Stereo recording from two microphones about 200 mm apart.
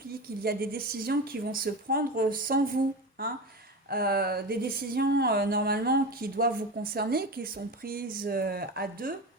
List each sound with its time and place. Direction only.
0.4 s speech: 50° right (ahead or behind)